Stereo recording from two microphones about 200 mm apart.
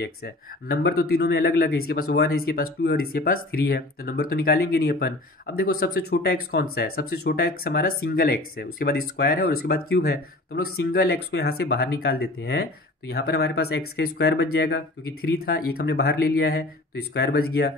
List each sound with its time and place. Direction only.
0.0 s speech: 50° left (ahead or behind)